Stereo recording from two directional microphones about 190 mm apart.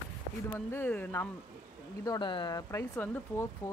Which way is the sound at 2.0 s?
20° left (ahead or behind).